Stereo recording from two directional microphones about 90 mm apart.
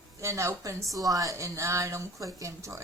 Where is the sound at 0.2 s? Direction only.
35° right (ahead or behind).